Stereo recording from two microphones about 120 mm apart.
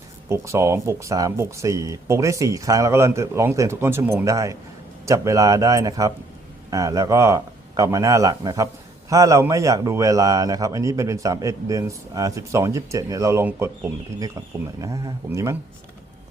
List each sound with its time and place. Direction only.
0.3 s speech: 25° right (ahead or behind)